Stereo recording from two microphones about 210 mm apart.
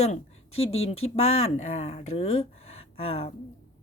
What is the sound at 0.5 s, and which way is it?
Speech, 75° left (ahead or behind).